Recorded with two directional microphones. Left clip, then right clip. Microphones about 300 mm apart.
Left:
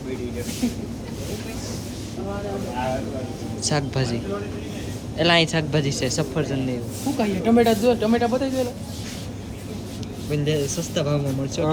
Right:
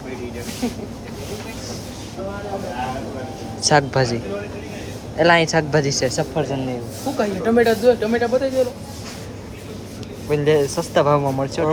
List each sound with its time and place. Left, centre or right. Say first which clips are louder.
0.6 s speech: right 2 dB; centre
3.6 s a man's voice: right 9 dB; centre
10.2 s speech: right 7 dB; centre